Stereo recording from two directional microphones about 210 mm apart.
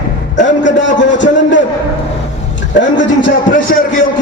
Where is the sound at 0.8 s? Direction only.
60° left (ahead or behind).